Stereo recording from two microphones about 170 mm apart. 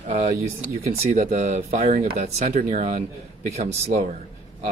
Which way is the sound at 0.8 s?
55° right (ahead or behind).